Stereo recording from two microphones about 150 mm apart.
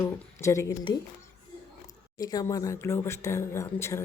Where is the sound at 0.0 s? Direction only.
20° left (ahead or behind).